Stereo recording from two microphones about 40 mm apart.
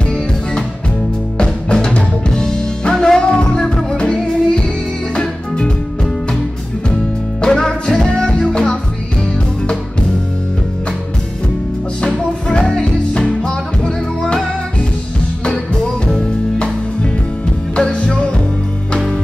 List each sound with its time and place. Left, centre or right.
1.4 s music: left
3.2 s music: left
7.4 s music: centre
12.4 s music: left